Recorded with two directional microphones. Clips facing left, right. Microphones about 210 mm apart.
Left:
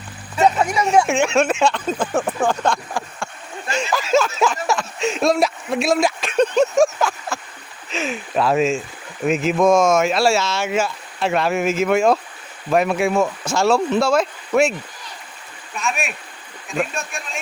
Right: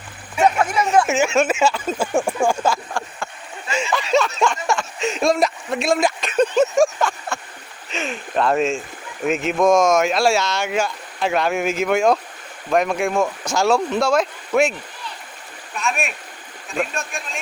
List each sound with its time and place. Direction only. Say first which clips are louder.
0.3 s a sound: left 1 dB; 10° right (ahead or behind)
0.6 s speech: even; 10° left (ahead or behind)
1.0 s speech: even; 5° right (ahead or behind)
3.8 s speech: left 1 dB; centre (ahead or behind)